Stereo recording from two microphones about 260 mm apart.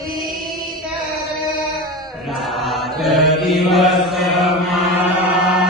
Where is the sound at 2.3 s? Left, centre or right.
Centre.